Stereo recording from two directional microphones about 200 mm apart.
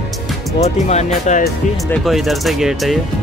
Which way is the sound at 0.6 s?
35° left (ahead or behind).